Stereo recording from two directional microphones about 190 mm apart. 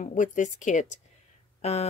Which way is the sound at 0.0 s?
40° left (ahead or behind).